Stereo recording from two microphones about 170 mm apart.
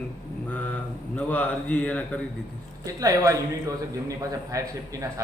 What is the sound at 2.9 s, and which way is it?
A man's voice, 20° right (ahead or behind).